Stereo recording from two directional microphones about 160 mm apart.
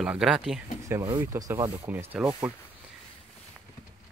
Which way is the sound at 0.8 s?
15° right (ahead or behind).